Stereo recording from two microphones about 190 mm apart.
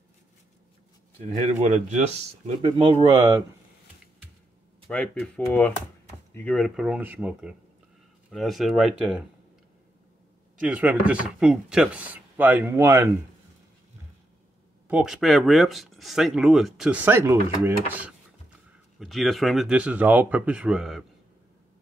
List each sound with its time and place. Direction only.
1.5 s speech: 35° right (ahead or behind)
2.8 s speech: 30° right (ahead or behind)
3.2 s speech: 15° right (ahead or behind)
4.8 s speech: 5° left (ahead or behind)
10.6 s speech: 10° right (ahead or behind)
14.9 s speech: 5° right (ahead or behind)
18.9 s speech: centre (ahead or behind)